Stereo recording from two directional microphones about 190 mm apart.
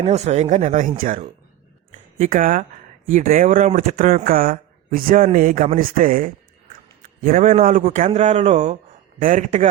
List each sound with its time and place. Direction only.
0.0 s a man's voice: 35° right (ahead or behind)